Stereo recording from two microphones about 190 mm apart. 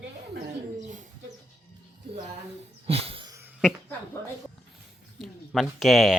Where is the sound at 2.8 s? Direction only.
30° right (ahead or behind).